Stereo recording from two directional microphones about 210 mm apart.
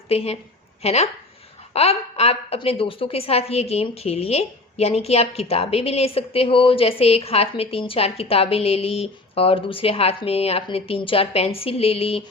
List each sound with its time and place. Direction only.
0.1 s a woman's voice: 30° left (ahead or behind)